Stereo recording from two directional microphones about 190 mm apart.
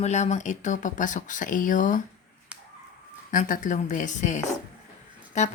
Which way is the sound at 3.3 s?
40° left (ahead or behind).